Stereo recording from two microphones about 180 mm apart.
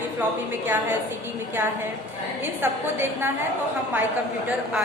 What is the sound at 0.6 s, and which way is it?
A woman's voice, 10° right (ahead or behind).